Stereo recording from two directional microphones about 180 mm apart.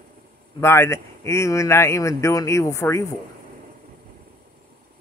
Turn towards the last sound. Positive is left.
turn(degrees=15)  # may be behind; listen again after turning